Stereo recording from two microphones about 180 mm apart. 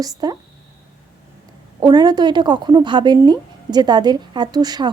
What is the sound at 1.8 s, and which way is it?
A woman's voice, 25° right (ahead or behind).